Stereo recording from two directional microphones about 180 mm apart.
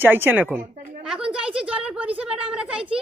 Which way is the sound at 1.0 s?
5° right (ahead or behind).